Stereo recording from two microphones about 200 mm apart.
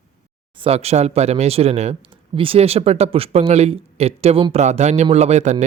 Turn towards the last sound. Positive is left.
turn(degrees=-35)  # may be behind; listen again after turning